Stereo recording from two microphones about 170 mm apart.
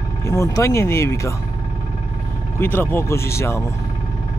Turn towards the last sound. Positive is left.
turn(degrees=15)  # may be behind; listen again after turning